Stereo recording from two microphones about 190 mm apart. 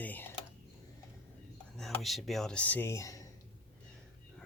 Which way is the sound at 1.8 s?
Centre (ahead or behind).